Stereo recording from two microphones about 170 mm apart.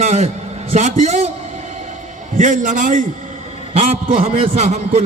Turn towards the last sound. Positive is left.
turn(degrees=-40)  # may be behind; listen again after turning